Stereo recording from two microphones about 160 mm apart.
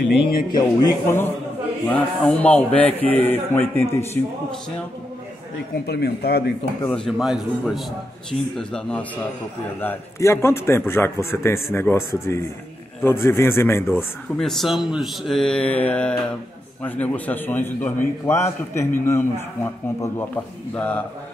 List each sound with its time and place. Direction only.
0.2 s speech: 65° left (ahead or behind)
0.6 s a man's voice: 25° left (ahead or behind)
5.9 s speech: 90° left
6.9 s a man's voice: 5° left (ahead or behind)
14.4 s a man's voice: centre (ahead or behind)